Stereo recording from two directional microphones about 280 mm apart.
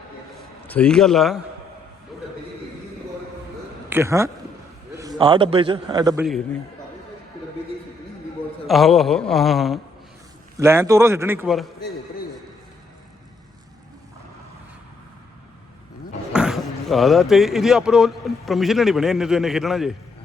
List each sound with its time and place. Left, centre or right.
0.7 s speech: centre
3.8 s a man's voice: centre
6.2 s speech: centre
8.6 s a man's voice: centre
16.3 s speech: centre